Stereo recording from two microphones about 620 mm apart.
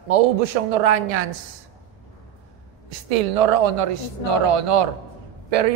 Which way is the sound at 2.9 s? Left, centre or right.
Right.